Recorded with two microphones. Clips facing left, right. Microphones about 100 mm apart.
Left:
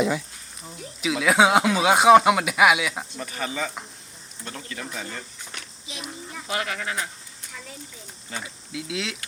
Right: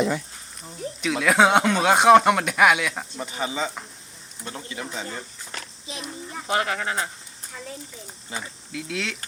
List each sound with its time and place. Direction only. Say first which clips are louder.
1.0 s speech: even; centre (ahead or behind)
3.2 s speech: right 3 dB; 20° right (ahead or behind)
5.5 s a sound: right 3 dB; 35° right (ahead or behind)
6.3 s speech: right 5 dB; 35° right (ahead or behind)
8.3 s speech: right 1 dB; 20° right (ahead or behind)
8.7 s speech: even; 5° left (ahead or behind)